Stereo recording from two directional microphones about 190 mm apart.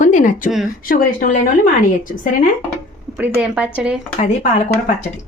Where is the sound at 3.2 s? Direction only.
5° right (ahead or behind).